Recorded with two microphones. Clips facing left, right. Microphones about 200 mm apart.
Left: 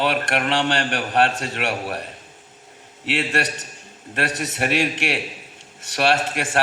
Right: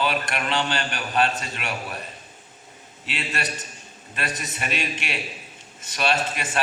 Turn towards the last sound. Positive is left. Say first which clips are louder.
# left 4 dB
turn(degrees=75)  # may be behind; listen again after turning